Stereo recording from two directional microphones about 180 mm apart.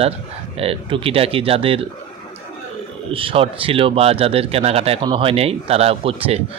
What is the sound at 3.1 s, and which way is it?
Speech, 30° right (ahead or behind).